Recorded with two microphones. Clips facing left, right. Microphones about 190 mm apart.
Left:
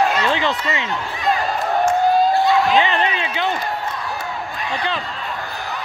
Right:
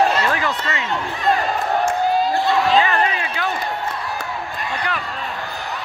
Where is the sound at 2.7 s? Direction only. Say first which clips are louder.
Even; 20° left (ahead or behind).